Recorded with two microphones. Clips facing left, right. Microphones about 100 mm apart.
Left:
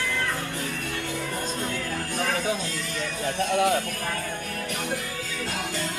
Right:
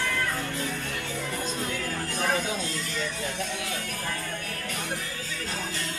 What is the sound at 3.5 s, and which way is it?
Speech, 55° left (ahead or behind).